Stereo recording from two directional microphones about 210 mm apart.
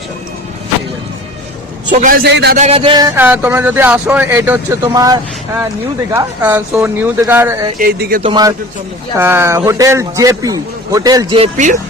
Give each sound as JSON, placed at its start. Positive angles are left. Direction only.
{"t": 1.9, "sound": "a man's voice", "side_deg": -40}
{"t": 2.3, "sound": "speech", "side_deg": -50}
{"t": 2.6, "sound": "speech", "side_deg": -30}
{"t": 3.2, "sound": "a man's voice", "side_deg": -10}
{"t": 7.8, "sound": "speech", "side_deg": -45}
{"t": 8.2, "sound": "a man's voice", "side_deg": -20}